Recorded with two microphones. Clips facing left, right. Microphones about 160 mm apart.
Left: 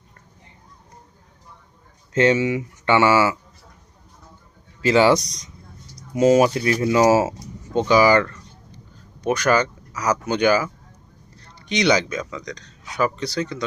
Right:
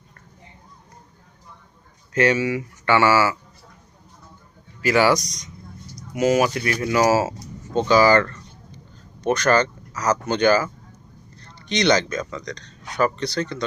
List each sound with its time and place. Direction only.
2.1 s speech: 20° left (ahead or behind)
4.8 s speech: 25° left (ahead or behind); by 13.7 s 5° left (ahead or behind)